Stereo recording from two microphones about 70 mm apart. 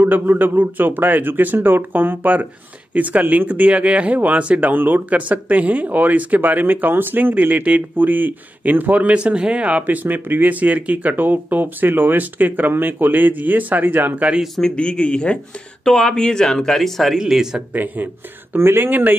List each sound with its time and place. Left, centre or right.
0.0 s speech: right
14.6 s speech: centre
17.2 s speech: centre
17.7 s speech: right